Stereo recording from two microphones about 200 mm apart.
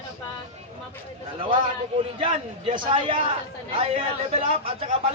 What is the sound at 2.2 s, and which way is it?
A man's voice, 25° right (ahead or behind).